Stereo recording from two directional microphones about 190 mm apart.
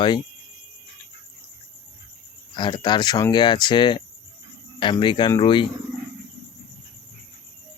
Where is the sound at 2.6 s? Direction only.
25° left (ahead or behind).